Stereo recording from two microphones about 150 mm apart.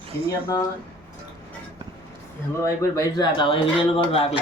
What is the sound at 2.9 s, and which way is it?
Speech, 25° left (ahead or behind).